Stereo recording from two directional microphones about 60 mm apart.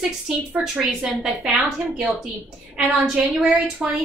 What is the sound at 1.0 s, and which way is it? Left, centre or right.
A woman's voice, centre.